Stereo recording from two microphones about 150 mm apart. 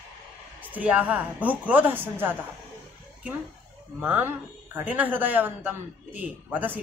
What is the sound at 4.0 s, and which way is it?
A man's voice, 15° right (ahead or behind).